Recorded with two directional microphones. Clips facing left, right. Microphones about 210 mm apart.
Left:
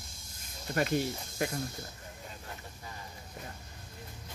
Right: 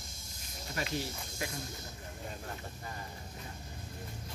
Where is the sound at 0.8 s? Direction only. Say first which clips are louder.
Left 7 dB; 55° left (ahead or behind).